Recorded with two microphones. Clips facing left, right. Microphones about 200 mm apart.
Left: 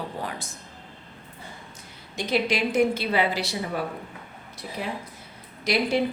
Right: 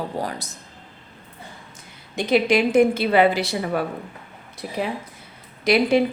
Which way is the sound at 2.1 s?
55° right (ahead or behind).